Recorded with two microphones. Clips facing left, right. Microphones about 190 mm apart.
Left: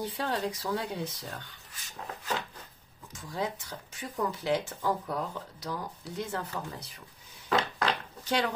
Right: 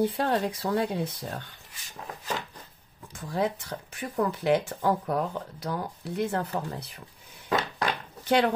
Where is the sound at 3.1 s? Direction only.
60° right (ahead or behind).